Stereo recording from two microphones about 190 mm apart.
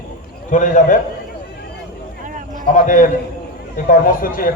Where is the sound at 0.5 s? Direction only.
40° left (ahead or behind).